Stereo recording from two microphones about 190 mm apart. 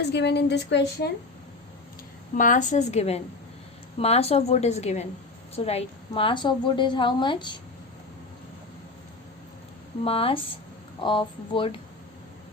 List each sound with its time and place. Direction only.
0.0 s a woman's voice: 60° left (ahead or behind)
2.3 s a woman's voice: 45° left (ahead or behind); by 7.6 s 25° left (ahead or behind)
10.0 s a woman's voice: 30° left (ahead or behind)